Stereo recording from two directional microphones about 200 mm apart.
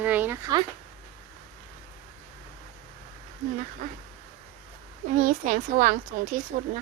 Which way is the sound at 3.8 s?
40° right (ahead or behind).